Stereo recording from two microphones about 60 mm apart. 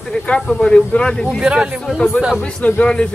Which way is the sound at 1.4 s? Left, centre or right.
Centre.